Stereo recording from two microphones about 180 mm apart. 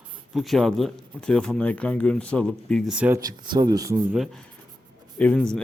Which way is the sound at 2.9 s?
10° right (ahead or behind).